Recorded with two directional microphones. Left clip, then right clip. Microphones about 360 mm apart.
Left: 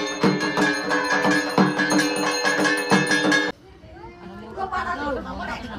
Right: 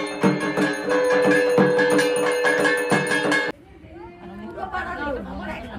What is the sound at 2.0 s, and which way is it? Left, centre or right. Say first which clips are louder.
Music: right 2 dB; centre.